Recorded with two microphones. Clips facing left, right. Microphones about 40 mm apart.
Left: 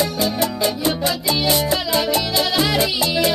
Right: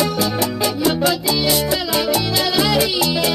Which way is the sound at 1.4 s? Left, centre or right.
Left.